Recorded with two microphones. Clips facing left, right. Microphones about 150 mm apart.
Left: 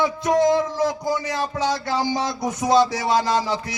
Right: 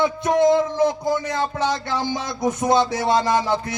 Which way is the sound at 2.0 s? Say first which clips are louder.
Even; 55° right (ahead or behind).